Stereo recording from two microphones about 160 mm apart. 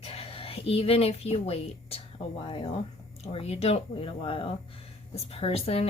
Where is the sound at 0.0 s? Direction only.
35° left (ahead or behind).